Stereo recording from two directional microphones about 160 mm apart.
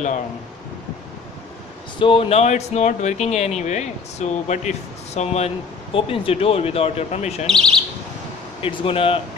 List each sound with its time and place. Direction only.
2.0 s speech: 35° left (ahead or behind)
7.4 s speech: 5° left (ahead or behind)
8.5 s speech: 35° left (ahead or behind)